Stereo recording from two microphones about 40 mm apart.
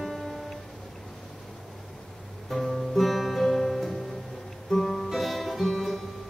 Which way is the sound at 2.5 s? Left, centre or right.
Centre.